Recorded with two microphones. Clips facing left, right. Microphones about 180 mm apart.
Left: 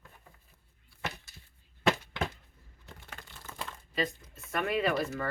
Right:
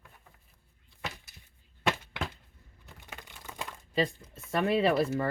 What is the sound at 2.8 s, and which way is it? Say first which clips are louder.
Crumpling: right 1 dB; 10° right (ahead or behind).